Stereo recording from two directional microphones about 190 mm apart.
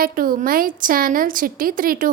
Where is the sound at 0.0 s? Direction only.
50° right (ahead or behind).